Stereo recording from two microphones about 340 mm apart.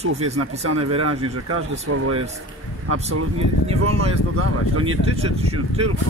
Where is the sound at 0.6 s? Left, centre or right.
Right.